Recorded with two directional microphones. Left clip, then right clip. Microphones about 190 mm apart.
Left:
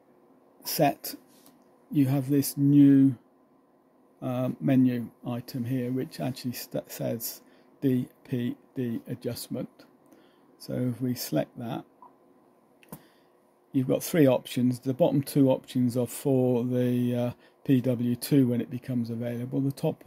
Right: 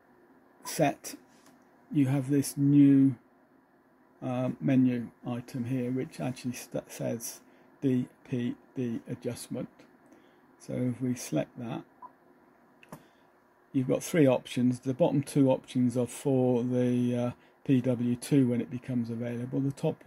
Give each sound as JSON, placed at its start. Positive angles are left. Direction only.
{"t": 0.7, "sound": "speech", "side_deg": 20}
{"t": 4.2, "sound": "speech", "side_deg": 20}
{"t": 13.7, "sound": "speech", "side_deg": 20}